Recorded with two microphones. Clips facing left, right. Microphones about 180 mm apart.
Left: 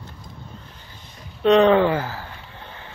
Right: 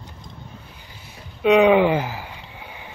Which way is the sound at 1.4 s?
10° right (ahead or behind).